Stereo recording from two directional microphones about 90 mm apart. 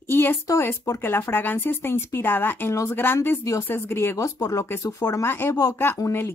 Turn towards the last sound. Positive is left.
turn(degrees=25)  # may be behind; listen again after turning